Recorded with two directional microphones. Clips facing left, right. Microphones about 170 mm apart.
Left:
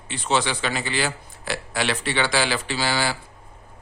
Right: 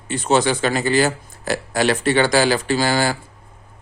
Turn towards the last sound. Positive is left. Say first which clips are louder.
# right 6 dB
turn(degrees=-45)  # may be behind; listen again after turning